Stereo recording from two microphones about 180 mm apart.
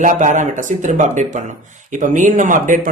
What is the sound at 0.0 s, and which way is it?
Speech, 45° right (ahead or behind).